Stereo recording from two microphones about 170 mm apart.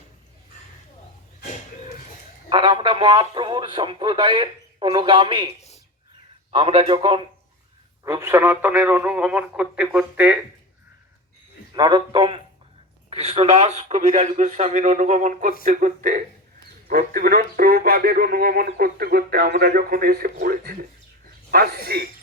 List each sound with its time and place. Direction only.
2.5 s speech: 25° right (ahead or behind)
6.5 s a man's voice: 30° right (ahead or behind)
8.0 s speech: 15° right (ahead or behind)
11.7 s a man's voice: 25° right (ahead or behind); by 22.1 s 65° right (ahead or behind)